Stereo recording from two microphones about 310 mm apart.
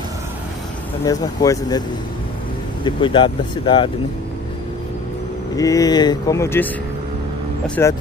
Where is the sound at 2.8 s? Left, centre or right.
Centre.